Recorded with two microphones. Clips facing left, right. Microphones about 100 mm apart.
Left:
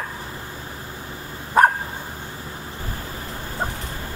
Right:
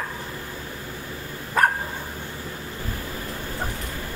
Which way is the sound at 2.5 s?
25° left (ahead or behind).